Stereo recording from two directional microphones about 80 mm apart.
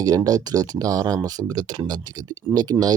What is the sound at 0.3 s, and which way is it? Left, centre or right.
Speech, right.